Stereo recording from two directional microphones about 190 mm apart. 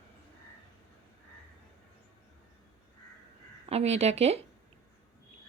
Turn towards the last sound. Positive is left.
turn(degrees=-35)  # may be behind; listen again after turning